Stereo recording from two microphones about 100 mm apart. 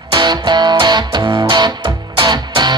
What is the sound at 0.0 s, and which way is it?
Music, 45° right (ahead or behind).